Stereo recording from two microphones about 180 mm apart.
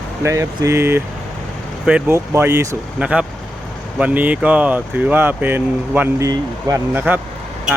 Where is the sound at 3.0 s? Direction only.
5° right (ahead or behind).